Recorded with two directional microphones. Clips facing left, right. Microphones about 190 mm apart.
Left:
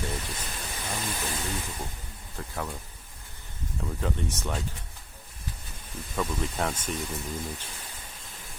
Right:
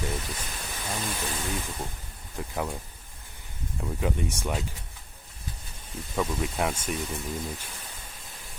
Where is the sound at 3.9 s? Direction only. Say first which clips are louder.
Right 3 dB; 15° right (ahead or behind).